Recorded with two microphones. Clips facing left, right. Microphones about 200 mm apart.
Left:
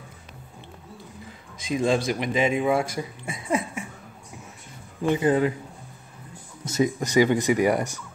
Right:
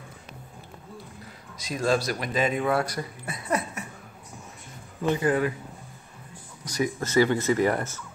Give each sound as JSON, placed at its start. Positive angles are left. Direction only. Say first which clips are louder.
{"t": 1.7, "sound": "speech", "louder": "left 2 dB", "side_deg": 20}
{"t": 5.0, "sound": "speech", "louder": "left 3 dB", "side_deg": 20}
{"t": 6.6, "sound": "speech", "louder": "left 4 dB", "side_deg": 25}